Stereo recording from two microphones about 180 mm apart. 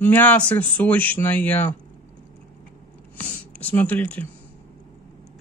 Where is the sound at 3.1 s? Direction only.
10° left (ahead or behind).